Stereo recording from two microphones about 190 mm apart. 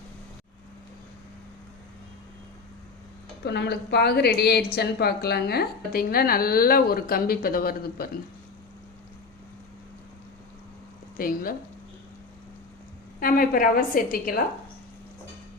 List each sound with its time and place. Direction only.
3.4 s a woman's voice: 60° left (ahead or behind)
11.2 s a woman's voice: 50° left (ahead or behind)
13.1 s a woman's voice: 50° left (ahead or behind)